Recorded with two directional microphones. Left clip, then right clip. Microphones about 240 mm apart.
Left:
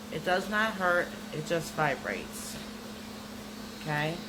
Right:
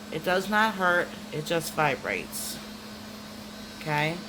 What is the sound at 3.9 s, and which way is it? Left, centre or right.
Speech, right.